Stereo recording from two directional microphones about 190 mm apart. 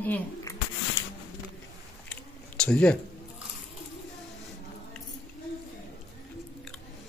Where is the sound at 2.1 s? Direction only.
5° left (ahead or behind).